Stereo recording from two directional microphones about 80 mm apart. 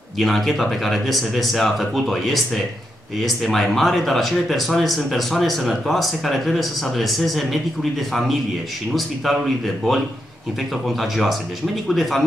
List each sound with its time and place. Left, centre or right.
0.2 s speech: centre
8.9 s speech: centre
10.9 s speech: centre